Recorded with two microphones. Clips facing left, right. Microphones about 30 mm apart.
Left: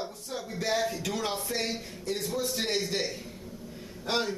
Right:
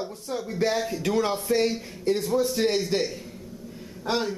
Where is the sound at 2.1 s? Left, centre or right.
Right.